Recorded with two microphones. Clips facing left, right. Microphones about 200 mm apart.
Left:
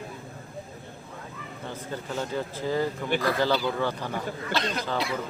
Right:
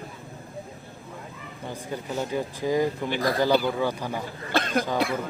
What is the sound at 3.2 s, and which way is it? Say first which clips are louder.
Speech: right 1 dB; 40° right (ahead or behind).